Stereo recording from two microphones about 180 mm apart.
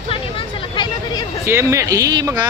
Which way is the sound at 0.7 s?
25° left (ahead or behind).